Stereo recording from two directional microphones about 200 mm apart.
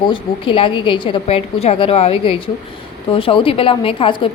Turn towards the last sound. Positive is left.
turn(degrees=25)  # may be behind; listen again after turning